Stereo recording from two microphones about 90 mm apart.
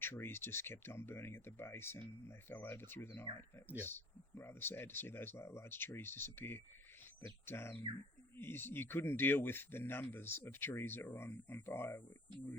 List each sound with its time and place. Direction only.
0.0 s speech: 25° left (ahead or behind)